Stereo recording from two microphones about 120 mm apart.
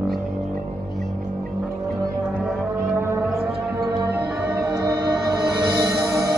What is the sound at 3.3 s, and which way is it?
Music, 25° right (ahead or behind).